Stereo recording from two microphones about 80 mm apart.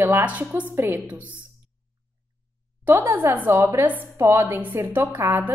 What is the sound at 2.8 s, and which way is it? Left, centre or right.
A woman's voice, right.